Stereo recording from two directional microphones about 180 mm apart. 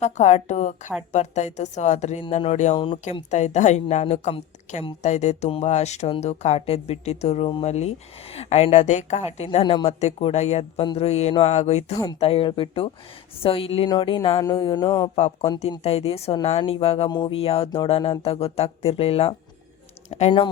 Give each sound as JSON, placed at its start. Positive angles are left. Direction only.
{"t": 0.0, "sound": "speech", "side_deg": 40}
{"t": 3.2, "sound": "speech", "side_deg": 40}
{"t": 15.1, "sound": "speech", "side_deg": 35}